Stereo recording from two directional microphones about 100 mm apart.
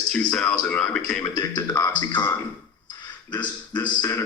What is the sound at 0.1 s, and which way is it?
Speech, 10° left (ahead or behind).